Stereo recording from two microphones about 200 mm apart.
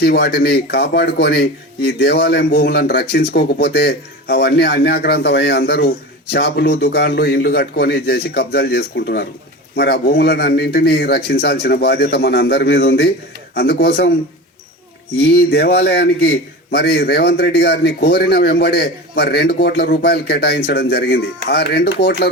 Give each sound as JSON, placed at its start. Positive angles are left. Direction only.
{"t": 0.0, "sound": "a man's voice", "side_deg": 55}
{"t": 15.2, "sound": "a man's voice", "side_deg": 50}